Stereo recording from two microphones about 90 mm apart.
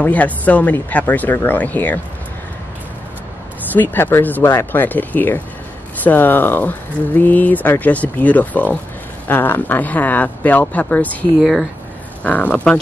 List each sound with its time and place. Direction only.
0.0 s speech: 15° left (ahead or behind)
3.7 s speech: 20° left (ahead or behind)